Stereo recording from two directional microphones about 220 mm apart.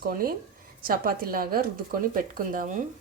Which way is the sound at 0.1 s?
40° right (ahead or behind).